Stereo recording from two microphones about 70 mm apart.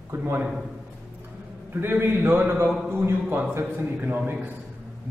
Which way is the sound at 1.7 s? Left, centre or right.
Right.